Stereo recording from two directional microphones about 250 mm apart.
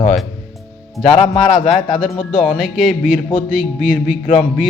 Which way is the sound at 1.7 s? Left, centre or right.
Left.